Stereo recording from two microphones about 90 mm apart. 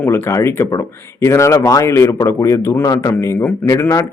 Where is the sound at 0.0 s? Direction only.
30° left (ahead or behind).